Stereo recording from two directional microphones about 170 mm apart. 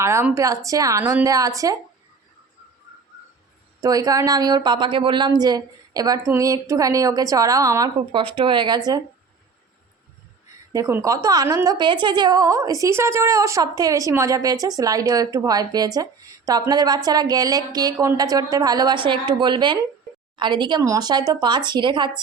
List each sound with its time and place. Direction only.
0.0 s a woman's voice: 15° right (ahead or behind)
3.8 s a woman's voice: 20° right (ahead or behind)
10.7 s a woman's voice: 20° right (ahead or behind)